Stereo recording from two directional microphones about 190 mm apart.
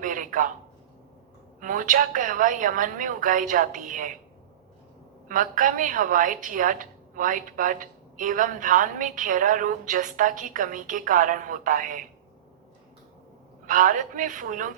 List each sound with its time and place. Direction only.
0.0 s a sound: 45° right (ahead or behind)
1.6 s a woman's voice: 45° right (ahead or behind)
5.3 s a woman's voice: 45° right (ahead or behind)
13.7 s a woman's voice: 45° right (ahead or behind)